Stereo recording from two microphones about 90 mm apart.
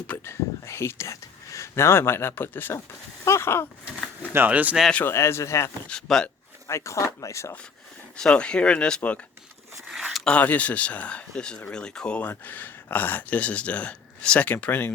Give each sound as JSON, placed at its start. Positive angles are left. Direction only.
{"t": 0.3, "sound": "speech", "side_deg": 30}
{"t": 4.3, "sound": "speech", "side_deg": -20}
{"t": 5.0, "sound": "speech", "side_deg": 30}
{"t": 5.9, "sound": "speech", "side_deg": 5}
{"t": 6.7, "sound": "speech", "side_deg": 35}
{"t": 8.1, "sound": "speech", "side_deg": 10}
{"t": 9.8, "sound": "zipper", "side_deg": 0}
{"t": 10.2, "sound": "speech", "side_deg": 15}